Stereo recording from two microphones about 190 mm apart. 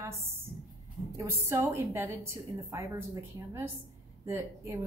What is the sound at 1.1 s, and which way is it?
A woman's voice, 15° right (ahead or behind).